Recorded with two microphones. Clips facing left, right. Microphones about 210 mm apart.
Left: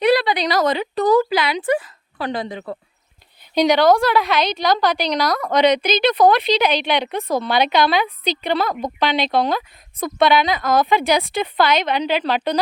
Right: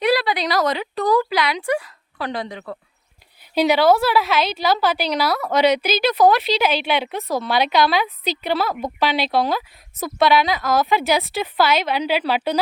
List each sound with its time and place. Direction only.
0.0 s a sound: centre (ahead or behind)
1.0 s speech: 20° left (ahead or behind)
1.3 s a woman's voice: centre (ahead or behind)